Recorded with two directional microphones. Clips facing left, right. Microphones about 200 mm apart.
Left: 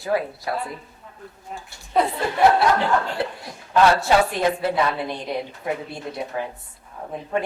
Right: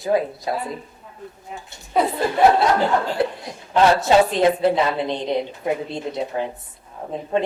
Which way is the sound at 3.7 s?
20° right (ahead or behind).